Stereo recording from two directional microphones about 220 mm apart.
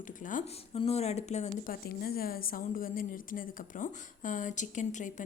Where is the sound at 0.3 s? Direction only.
35° left (ahead or behind).